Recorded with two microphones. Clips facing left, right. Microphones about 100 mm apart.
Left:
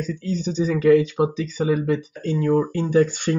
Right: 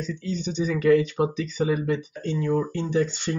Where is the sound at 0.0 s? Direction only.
40° left (ahead or behind).